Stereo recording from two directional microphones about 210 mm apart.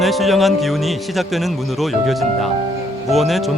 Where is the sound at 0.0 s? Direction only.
Centre (ahead or behind).